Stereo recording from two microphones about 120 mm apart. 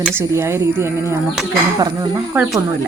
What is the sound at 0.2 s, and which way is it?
Speech, 20° right (ahead or behind).